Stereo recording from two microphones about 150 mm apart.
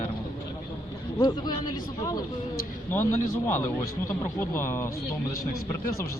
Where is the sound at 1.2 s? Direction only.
25° left (ahead or behind).